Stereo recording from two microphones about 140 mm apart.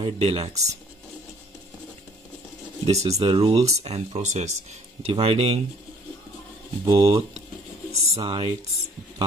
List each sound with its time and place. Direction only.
0.0 s speech: 45° right (ahead or behind)
2.9 s speech: 50° right (ahead or behind)
6.9 s speech: 35° right (ahead or behind)